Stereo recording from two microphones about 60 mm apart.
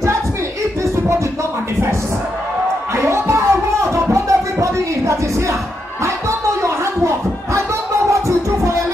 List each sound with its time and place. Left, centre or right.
3.0 s music: right
6.0 s a sound: right
8.1 s music: right